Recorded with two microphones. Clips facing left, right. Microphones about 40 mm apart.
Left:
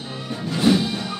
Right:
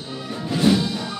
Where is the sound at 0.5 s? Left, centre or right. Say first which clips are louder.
Even; centre.